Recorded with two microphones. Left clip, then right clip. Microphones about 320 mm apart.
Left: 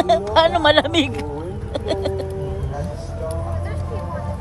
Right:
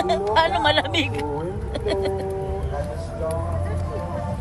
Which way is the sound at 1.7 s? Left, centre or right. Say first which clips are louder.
Left 1 dB; centre.